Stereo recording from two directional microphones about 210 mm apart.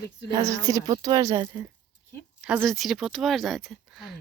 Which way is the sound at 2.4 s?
Centre (ahead or behind).